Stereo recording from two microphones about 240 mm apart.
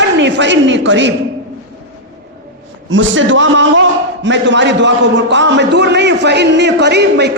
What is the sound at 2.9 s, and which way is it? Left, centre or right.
A man's voice, right.